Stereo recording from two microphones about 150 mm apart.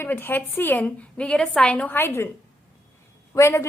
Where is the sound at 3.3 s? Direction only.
20° left (ahead or behind).